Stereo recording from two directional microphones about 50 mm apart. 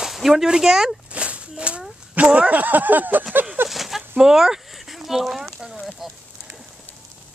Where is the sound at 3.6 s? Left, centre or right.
Centre.